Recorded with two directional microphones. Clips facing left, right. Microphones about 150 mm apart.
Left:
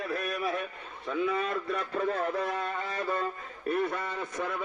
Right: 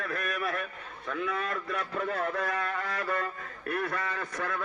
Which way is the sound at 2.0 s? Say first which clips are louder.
Left 2 dB; 30° left (ahead or behind).